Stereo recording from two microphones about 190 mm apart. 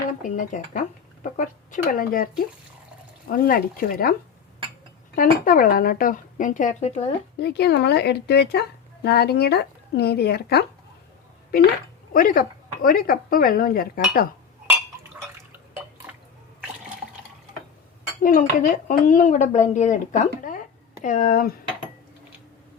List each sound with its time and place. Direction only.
0.2 s speech: 40° left (ahead or behind)
5.1 s speech: 50° left (ahead or behind)
7.3 s speech: 60° left (ahead or behind)
12.1 s speech: 45° left (ahead or behind)
18.2 s speech: 45° left (ahead or behind)